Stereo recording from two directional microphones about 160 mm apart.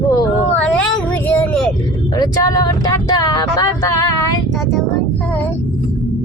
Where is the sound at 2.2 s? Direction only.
25° left (ahead or behind).